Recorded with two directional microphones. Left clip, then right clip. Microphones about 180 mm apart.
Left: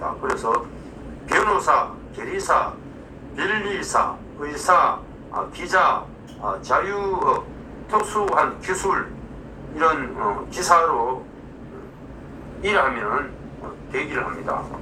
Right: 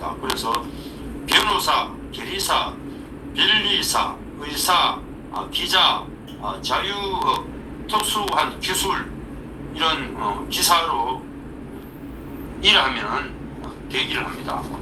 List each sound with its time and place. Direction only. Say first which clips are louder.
0.0 s a man's voice: left 1 dB; 15° right (ahead or behind)
12.6 s a man's voice: right 3 dB; 20° right (ahead or behind)